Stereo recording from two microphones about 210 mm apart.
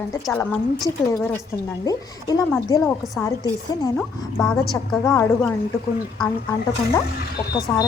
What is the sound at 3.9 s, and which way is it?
A woman's voice, 5° left (ahead or behind).